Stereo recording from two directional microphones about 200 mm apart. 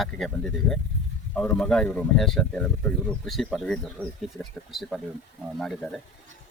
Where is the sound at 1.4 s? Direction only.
5° left (ahead or behind).